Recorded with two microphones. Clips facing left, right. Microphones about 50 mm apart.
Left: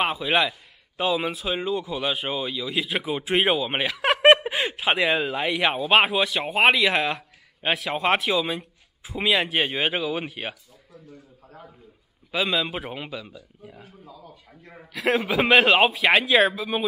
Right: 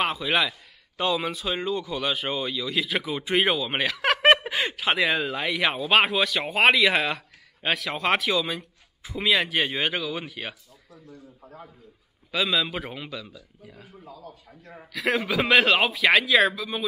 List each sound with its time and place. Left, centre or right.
0.0 s a man's voice: centre
10.2 s speech: left
11.4 s a man's voice: centre
12.5 s speech: centre